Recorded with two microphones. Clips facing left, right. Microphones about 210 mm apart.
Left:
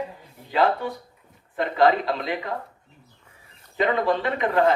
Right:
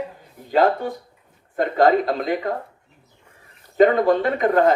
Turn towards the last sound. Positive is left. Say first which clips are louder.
# right 4 dB
turn(degrees=-45)  # may be behind; listen again after turning